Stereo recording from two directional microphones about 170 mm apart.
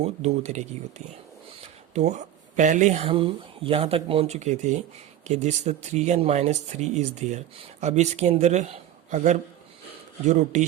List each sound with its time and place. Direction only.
0.0 s speech: 40° right (ahead or behind)